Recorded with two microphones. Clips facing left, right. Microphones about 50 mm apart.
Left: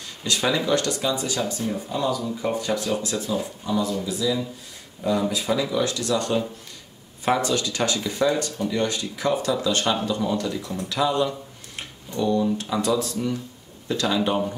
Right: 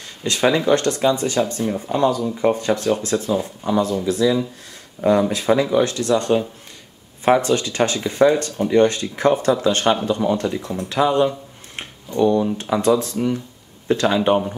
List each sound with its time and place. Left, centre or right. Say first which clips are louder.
0.2 s speech: right 5 dB; right
5.3 s speech: right 7 dB; right